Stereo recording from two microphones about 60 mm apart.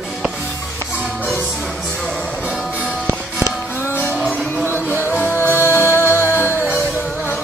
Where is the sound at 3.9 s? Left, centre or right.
Left.